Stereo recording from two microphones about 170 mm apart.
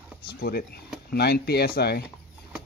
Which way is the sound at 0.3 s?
65° left (ahead or behind).